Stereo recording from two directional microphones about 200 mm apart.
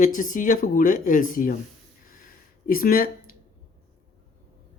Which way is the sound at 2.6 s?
45° left (ahead or behind).